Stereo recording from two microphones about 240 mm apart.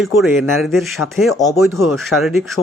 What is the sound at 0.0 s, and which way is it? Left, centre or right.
Speech, centre.